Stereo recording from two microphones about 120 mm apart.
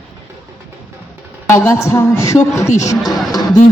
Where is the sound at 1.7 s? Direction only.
25° left (ahead or behind).